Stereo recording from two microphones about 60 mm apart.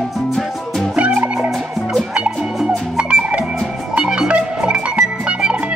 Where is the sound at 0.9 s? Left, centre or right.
Right.